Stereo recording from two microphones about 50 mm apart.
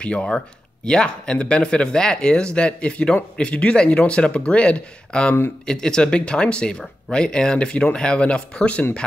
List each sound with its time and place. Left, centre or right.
0.0 s speech: left